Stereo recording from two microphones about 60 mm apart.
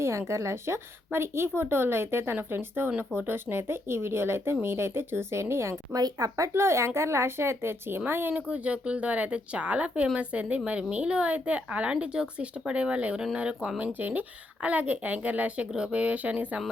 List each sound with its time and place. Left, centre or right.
0.0 s a woman's voice: right
5.9 s speech: right
6.5 s a woman's voice: right